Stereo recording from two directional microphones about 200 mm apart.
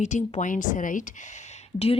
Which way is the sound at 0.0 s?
35° left (ahead or behind).